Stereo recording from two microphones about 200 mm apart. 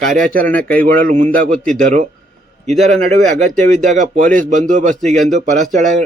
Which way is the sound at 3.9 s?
40° right (ahead or behind).